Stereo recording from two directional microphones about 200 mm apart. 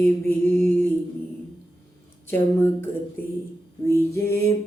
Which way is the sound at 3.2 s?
10° left (ahead or behind).